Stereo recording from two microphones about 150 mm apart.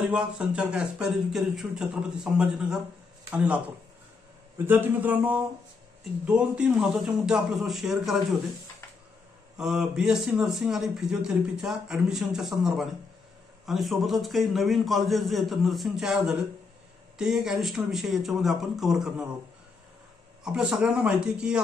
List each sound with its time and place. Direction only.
0.1 s speech: 10° right (ahead or behind)
4.6 s speech: 15° right (ahead or behind)
9.6 s speech: 5° right (ahead or behind)
20.4 s speech: 5° right (ahead or behind)